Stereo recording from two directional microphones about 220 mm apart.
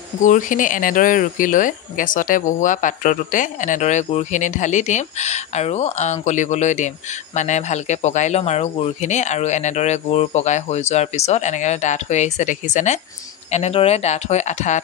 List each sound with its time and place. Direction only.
0.2 s speech: 35° left (ahead or behind)